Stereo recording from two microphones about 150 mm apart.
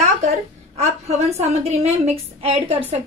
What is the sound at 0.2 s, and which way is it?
A woman's voice, 45° right (ahead or behind).